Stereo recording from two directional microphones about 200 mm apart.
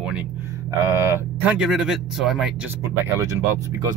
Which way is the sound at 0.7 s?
15° right (ahead or behind).